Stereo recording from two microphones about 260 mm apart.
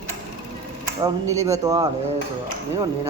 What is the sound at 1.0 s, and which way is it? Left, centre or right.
Speech, centre.